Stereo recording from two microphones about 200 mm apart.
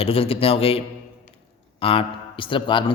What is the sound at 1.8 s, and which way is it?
A man's voice, 25° left (ahead or behind).